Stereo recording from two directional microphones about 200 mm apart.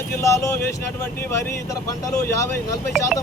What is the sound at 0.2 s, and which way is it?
Speech, 15° left (ahead or behind).